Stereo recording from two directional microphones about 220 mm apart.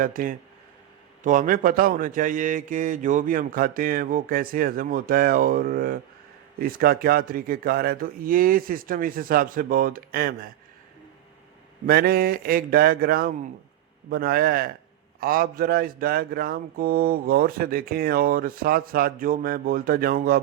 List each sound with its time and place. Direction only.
0.0 s speech: 40° right (ahead or behind)
11.9 s a man's voice: 45° right (ahead or behind)